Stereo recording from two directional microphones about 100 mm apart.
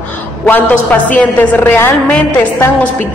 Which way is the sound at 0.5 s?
15° left (ahead or behind).